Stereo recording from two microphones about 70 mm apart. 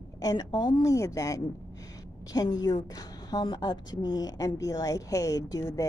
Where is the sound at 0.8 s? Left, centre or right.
Left.